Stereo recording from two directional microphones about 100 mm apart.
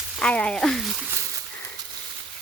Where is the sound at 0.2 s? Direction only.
10° left (ahead or behind).